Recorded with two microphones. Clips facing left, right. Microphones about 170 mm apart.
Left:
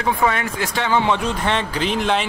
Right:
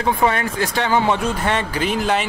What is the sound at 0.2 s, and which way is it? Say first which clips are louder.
Speech: right 2 dB; 35° right (ahead or behind).